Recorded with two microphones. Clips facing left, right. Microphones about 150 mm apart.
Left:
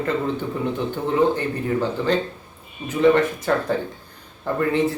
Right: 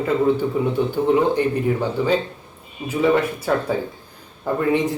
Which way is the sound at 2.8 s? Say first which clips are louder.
Left 1 dB; 5° right (ahead or behind).